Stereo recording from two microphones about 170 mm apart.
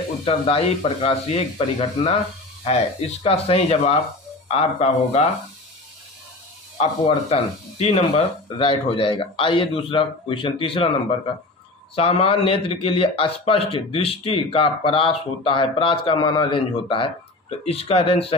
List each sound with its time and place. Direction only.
0.2 s a man's voice: 35° left (ahead or behind)
3.3 s a man's voice: 35° left (ahead or behind)
6.8 s a man's voice: 40° left (ahead or behind)